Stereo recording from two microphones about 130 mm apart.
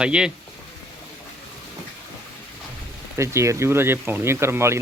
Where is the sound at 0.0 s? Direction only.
5° right (ahead or behind).